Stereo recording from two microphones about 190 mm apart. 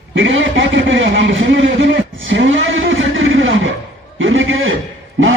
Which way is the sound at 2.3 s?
85° right.